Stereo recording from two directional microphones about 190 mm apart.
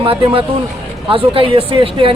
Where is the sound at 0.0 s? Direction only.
30° right (ahead or behind).